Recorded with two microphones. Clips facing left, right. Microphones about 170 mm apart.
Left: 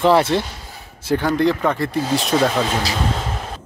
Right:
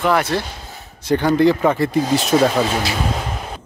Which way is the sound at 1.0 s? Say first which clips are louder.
Right 3 dB; 5° left (ahead or behind).